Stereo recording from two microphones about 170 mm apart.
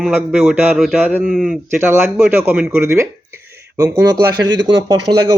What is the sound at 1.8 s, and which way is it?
Speech, 15° right (ahead or behind).